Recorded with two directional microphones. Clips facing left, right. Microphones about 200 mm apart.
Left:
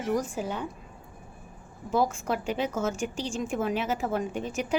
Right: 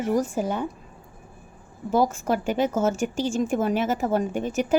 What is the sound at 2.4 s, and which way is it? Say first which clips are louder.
A woman's voice: right 7 dB; 45° right (ahead or behind).